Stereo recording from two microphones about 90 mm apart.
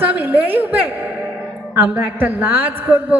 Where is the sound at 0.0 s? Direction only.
20° right (ahead or behind).